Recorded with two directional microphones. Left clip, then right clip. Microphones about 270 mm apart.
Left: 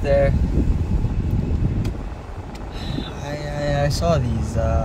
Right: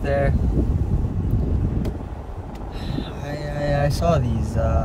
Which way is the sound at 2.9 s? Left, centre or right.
Centre.